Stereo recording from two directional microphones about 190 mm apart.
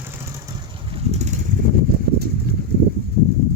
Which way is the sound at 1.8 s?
55° right (ahead or behind).